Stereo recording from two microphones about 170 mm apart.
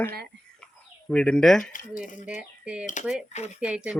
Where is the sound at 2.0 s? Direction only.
5° right (ahead or behind).